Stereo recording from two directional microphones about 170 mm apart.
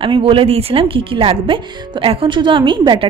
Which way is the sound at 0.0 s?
30° right (ahead or behind).